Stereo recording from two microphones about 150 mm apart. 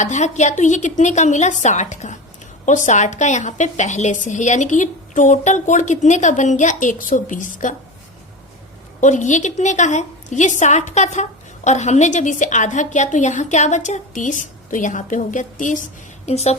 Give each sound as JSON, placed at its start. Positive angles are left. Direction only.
{"t": 0.0, "sound": "a woman's voice", "side_deg": 50}
{"t": 9.0, "sound": "a woman's voice", "side_deg": 55}